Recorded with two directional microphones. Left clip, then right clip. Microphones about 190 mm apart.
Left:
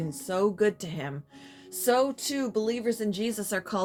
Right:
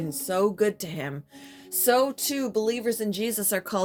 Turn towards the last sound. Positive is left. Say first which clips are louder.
# right 3 dB
turn(degrees=-45)  # may be behind; listen again after turning